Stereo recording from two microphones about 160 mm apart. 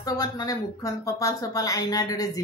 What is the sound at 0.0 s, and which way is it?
Speech, 25° left (ahead or behind).